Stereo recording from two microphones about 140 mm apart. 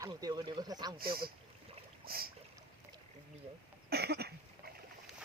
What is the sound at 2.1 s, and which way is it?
Boat, 90° right.